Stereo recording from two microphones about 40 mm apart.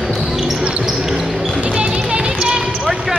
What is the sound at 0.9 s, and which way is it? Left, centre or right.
Basketball bounce, centre.